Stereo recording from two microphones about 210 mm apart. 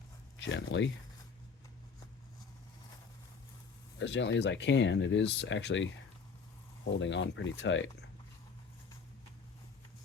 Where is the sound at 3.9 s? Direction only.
60° left (ahead or behind).